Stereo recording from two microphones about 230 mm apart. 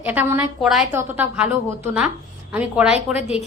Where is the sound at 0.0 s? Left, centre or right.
Centre.